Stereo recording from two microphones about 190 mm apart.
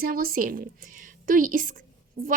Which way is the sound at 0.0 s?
50° right (ahead or behind).